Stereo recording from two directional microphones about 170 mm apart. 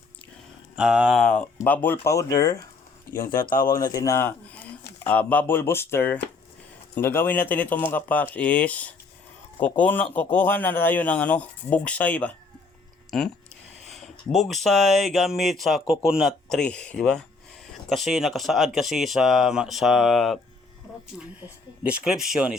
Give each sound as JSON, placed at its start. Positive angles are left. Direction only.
{"t": 0.8, "sound": "speech", "side_deg": -5}
{"t": 3.5, "sound": "speech", "side_deg": 55}
{"t": 3.9, "sound": "speech", "side_deg": 15}
{"t": 21.8, "sound": "speech", "side_deg": -5}